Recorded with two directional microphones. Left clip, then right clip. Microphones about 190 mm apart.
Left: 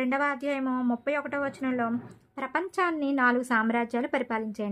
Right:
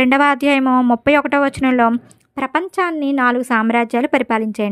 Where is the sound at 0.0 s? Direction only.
40° right (ahead or behind).